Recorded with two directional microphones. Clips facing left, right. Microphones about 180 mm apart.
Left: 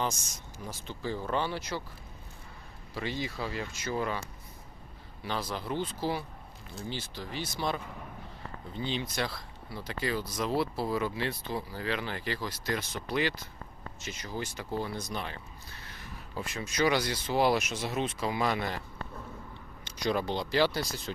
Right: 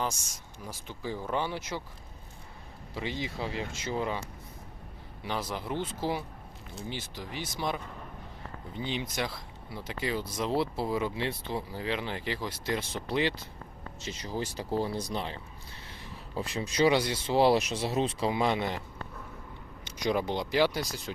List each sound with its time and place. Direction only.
0.6 s speech: 10° right (ahead or behind)
2.9 s speech: 20° right (ahead or behind)
5.2 s speech: 15° right (ahead or behind)
20.0 s speech: 15° right (ahead or behind)